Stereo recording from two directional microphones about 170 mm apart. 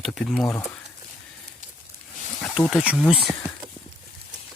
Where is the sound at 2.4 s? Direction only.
Centre (ahead or behind).